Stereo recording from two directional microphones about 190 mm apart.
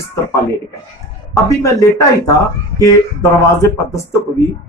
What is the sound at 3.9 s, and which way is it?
Speech, 15° left (ahead or behind).